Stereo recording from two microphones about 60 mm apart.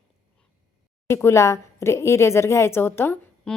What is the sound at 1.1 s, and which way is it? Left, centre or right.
Speech, left.